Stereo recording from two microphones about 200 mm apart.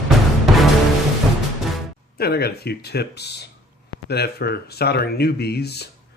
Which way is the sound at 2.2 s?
50° left (ahead or behind).